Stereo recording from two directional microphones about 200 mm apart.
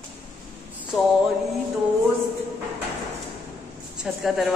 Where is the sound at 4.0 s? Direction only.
Centre (ahead or behind).